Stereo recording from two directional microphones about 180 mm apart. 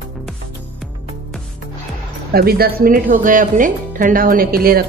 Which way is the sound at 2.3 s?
60° right (ahead or behind).